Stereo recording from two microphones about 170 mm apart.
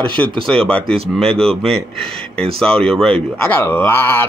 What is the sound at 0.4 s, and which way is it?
Speech, 5° left (ahead or behind).